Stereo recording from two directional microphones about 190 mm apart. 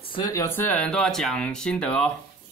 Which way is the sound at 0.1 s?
20° left (ahead or behind).